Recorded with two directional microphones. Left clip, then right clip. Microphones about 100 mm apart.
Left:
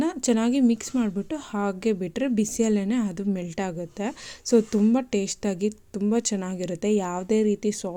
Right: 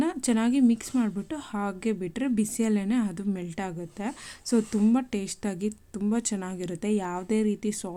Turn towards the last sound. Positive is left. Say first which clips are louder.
# left 5 dB
turn(degrees=20)  # may be behind; listen again after turning